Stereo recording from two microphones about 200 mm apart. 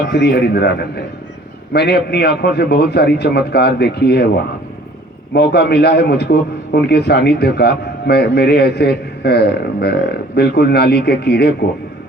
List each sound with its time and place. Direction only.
0.1 s a man's voice: 55° left (ahead or behind)
5.3 s a man's voice: 60° left (ahead or behind)